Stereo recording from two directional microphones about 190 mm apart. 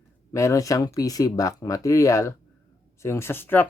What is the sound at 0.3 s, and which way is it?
Speech, 15° left (ahead or behind).